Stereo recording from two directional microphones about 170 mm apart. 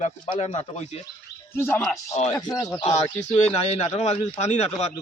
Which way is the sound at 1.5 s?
15° left (ahead or behind).